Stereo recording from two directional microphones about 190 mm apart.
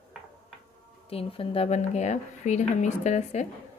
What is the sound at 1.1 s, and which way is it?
Speech, 30° left (ahead or behind).